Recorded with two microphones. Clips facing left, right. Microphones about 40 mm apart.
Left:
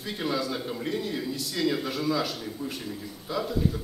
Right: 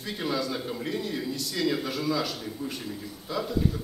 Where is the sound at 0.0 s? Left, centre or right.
Centre.